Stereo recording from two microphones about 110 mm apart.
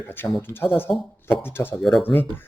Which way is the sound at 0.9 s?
55° left (ahead or behind).